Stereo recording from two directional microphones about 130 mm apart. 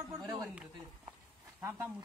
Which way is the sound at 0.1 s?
30° right (ahead or behind).